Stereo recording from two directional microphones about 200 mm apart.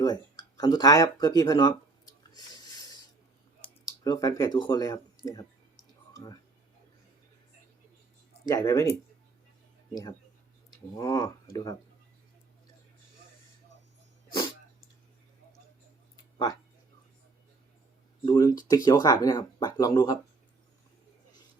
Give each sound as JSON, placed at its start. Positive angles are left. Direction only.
{"t": 0.0, "sound": "speech", "side_deg": 20}
{"t": 2.3, "sound": "a sound", "side_deg": 20}
{"t": 4.0, "sound": "speech", "side_deg": 20}
{"t": 8.4, "sound": "speech", "side_deg": 15}
{"t": 18.3, "sound": "speech", "side_deg": 20}